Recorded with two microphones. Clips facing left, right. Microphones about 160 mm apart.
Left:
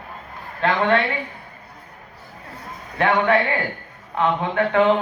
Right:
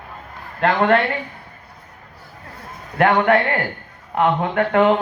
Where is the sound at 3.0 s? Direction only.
55° right (ahead or behind).